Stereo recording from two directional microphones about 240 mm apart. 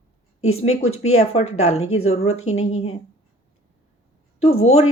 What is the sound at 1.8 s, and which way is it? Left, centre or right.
Speech, left.